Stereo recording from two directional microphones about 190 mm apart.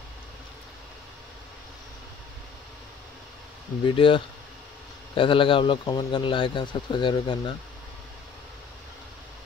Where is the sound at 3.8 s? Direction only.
25° left (ahead or behind).